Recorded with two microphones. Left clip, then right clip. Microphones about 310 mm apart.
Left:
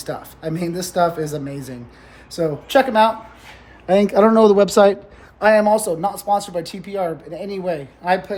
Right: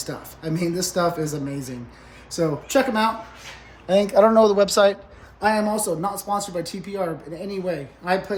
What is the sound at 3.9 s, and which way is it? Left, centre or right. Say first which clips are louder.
Speech: left 2 dB; left.